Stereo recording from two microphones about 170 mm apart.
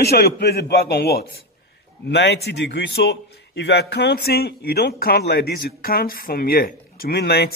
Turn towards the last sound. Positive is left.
turn(degrees=70)  # may be behind; listen again after turning